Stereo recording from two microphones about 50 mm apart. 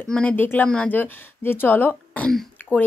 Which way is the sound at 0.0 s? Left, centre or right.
Centre.